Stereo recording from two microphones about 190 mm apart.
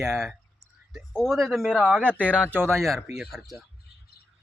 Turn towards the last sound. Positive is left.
turn(degrees=0)  # may be behind; listen again after turning